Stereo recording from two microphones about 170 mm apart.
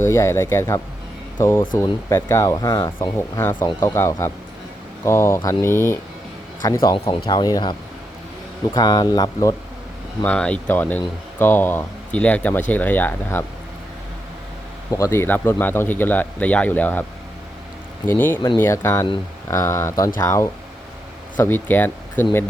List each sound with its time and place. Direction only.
0.0 s a man's voice: 15° left (ahead or behind)
6.8 s speech: 25° left (ahead or behind)
10.2 s a man's voice: 5° left (ahead or behind)
14.8 s a man's voice: 15° left (ahead or behind)